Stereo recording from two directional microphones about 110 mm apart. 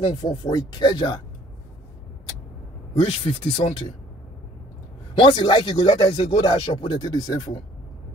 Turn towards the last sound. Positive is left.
turn(degrees=40)  # may be behind; listen again after turning